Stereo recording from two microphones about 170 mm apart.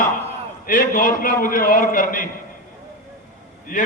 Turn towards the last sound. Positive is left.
turn(degrees=50)  # may be behind; listen again after turning